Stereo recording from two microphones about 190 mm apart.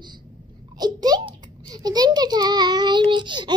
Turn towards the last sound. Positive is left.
turn(degrees=-25)  # may be behind; listen again after turning